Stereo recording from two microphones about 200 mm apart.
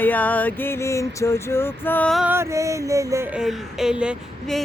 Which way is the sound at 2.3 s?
15° right (ahead or behind).